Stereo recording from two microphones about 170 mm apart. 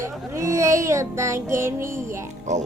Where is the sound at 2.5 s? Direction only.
45° right (ahead or behind).